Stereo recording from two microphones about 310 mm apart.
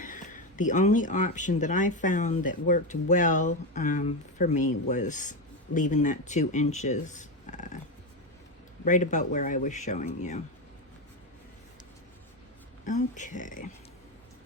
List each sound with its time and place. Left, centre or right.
0.0 s speech: left
8.8 s speech: left
12.8 s speech: left